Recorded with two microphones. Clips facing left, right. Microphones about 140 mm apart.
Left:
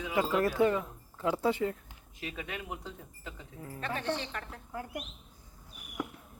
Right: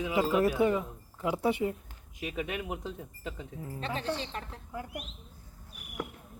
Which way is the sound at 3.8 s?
30° right (ahead or behind).